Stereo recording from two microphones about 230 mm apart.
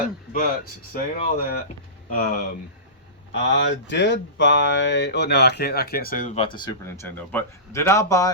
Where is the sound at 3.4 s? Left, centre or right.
Left.